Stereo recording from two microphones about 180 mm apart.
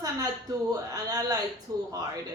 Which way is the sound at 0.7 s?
20° right (ahead or behind).